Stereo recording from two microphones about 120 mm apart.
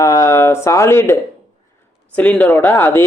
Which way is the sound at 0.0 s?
25° left (ahead or behind).